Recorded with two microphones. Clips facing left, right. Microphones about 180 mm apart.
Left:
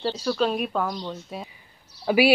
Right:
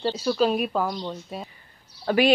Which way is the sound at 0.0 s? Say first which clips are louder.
Right 2 dB; 5° right (ahead or behind).